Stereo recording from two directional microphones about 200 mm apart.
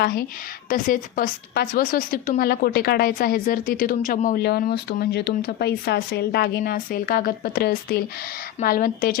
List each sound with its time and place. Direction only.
0.0 s a woman's voice: 50° left (ahead or behind)